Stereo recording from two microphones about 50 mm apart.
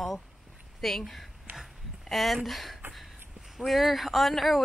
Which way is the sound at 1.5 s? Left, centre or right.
Right.